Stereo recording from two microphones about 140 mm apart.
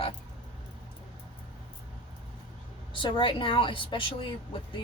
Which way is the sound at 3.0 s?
35° left (ahead or behind).